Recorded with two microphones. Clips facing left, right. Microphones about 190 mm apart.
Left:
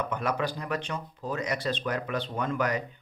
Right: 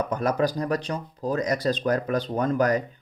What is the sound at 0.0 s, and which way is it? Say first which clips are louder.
Speech: right 6 dB; 40° right (ahead or behind).